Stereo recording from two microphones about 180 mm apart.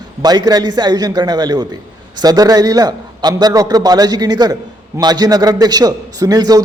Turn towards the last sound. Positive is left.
turn(degrees=-20)  # may be behind; listen again after turning